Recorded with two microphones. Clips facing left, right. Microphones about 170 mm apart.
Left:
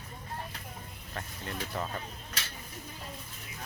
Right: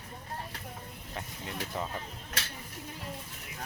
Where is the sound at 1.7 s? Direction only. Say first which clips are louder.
Even; 15° right (ahead or behind).